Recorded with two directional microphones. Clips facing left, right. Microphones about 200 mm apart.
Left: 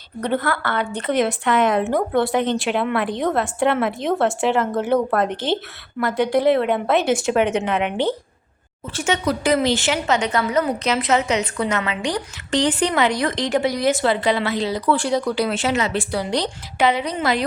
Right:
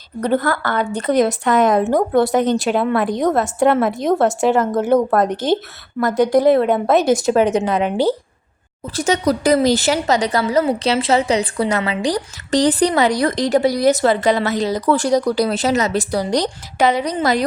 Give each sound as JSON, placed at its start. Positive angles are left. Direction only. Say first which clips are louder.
{"t": 0.2, "sound": "speech", "louder": "right 4 dB", "side_deg": -40}